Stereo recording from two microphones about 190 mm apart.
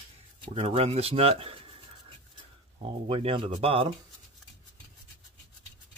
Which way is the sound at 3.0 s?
30° right (ahead or behind).